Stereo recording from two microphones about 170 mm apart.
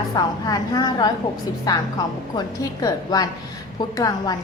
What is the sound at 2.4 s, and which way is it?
A woman's voice, 20° left (ahead or behind).